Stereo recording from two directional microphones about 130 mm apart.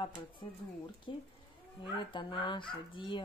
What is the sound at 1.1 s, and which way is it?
Speech, 40° left (ahead or behind).